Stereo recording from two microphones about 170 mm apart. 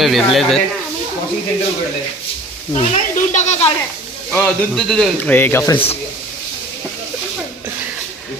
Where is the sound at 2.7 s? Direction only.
45° left (ahead or behind).